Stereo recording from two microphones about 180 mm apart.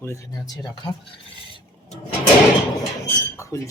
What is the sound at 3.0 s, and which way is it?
Dishes, 15° left (ahead or behind).